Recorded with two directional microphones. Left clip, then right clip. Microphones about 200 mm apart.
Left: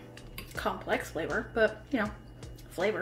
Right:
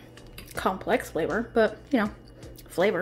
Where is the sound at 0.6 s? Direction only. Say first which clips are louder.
Right 6 dB; 55° right (ahead or behind).